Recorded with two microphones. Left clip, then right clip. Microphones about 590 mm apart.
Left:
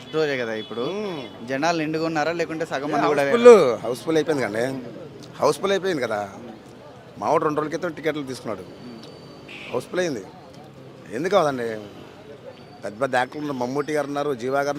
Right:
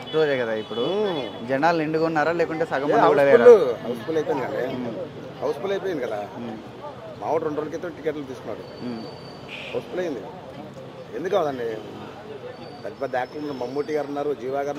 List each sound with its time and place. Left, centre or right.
0.1 s speech: centre
3.4 s a man's voice: left
9.9 s a man's voice: left
11.2 s a man's voice: left
12.8 s a man's voice: left